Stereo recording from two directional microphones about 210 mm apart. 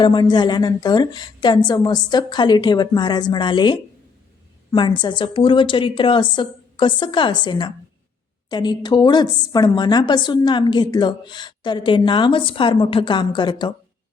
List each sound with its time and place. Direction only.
0.0 s a woman's voice: 20° left (ahead or behind)